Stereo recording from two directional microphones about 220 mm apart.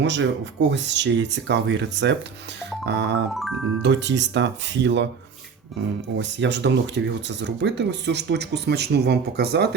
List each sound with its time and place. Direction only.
0.0 s speech: 55° right (ahead or behind)
3.3 s speech: centre (ahead or behind)
3.8 s speech: 55° right (ahead or behind)
6.1 s speech: 55° right (ahead or behind)